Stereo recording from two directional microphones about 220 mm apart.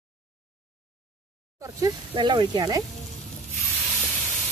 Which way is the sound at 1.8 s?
20° right (ahead or behind).